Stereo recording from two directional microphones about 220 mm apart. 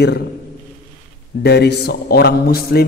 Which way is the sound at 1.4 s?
50° left (ahead or behind).